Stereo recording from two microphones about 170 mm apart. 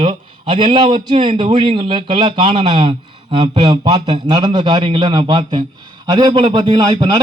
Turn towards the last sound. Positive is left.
turn(degrees=-25)  # may be behind; listen again after turning